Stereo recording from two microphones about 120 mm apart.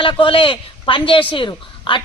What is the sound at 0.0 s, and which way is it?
A woman's voice, 45° left (ahead or behind).